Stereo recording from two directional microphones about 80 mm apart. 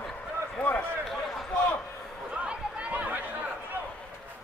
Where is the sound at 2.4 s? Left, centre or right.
Centre.